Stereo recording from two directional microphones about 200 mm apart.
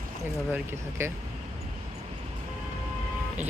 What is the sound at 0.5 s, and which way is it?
Speech, 15° right (ahead or behind).